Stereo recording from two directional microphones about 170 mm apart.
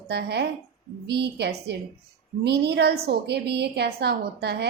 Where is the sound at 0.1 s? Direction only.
75° right (ahead or behind).